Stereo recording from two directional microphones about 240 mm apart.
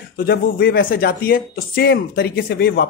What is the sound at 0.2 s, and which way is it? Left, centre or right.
Speech, left.